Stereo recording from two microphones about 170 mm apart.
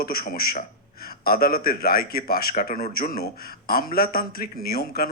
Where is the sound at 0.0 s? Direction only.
60° left (ahead or behind).